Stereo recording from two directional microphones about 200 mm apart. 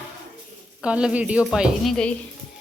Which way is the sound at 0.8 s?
5° right (ahead or behind).